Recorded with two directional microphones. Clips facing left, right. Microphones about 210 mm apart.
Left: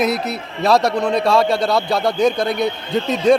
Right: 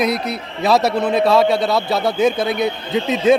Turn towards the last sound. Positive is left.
turn(degrees=0)  # may be behind; listen again after turning